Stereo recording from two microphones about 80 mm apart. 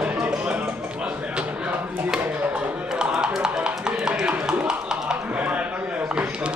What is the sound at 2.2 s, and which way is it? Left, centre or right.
Chop, centre.